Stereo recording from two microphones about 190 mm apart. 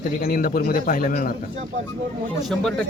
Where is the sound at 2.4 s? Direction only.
Centre (ahead or behind).